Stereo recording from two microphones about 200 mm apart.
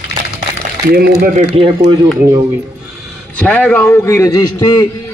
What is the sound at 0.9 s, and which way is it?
Speech, 50° right (ahead or behind).